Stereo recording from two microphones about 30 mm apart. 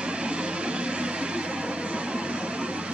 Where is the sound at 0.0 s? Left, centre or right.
Right.